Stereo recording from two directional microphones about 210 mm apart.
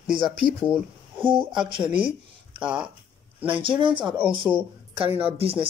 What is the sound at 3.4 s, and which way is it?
Speech, 25° right (ahead or behind).